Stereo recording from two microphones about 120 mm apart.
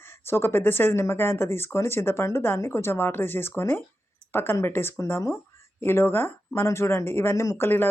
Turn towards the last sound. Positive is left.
turn(degrees=20)  # may be behind; listen again after turning